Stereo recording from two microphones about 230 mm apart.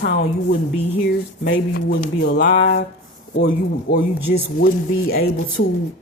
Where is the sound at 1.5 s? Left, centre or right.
Left.